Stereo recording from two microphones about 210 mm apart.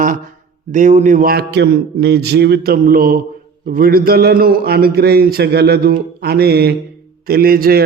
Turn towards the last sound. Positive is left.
turn(degrees=-45)  # may be behind; listen again after turning